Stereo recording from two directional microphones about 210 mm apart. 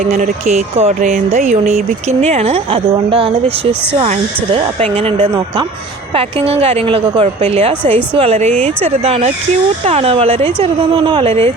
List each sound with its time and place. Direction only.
0.0 s a woman's voice: 35° right (ahead or behind)